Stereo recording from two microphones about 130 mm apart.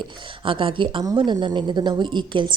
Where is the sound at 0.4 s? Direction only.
40° right (ahead or behind).